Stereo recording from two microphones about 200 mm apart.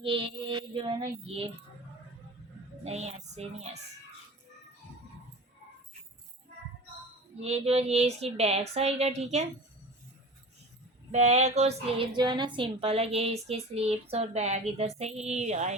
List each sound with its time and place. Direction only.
0.0 s music: 25° right (ahead or behind)
2.8 s a woman's voice: 35° right (ahead or behind)
7.3 s a woman's voice: 30° right (ahead or behind)
11.1 s a woman's voice: 35° right (ahead or behind)